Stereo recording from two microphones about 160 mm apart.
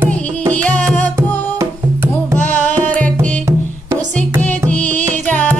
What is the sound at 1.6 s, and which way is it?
Music, 15° right (ahead or behind).